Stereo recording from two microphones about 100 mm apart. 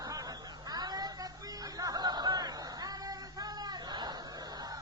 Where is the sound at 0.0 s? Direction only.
40° right (ahead or behind).